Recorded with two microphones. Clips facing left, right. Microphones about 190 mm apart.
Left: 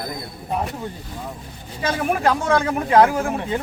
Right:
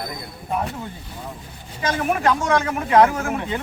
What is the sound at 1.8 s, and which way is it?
Speech, 35° left (ahead or behind).